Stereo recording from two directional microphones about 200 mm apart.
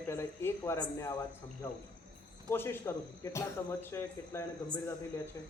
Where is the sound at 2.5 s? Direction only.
10° left (ahead or behind).